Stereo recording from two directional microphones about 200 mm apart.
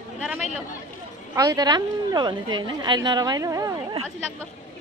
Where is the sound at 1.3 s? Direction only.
20° right (ahead or behind).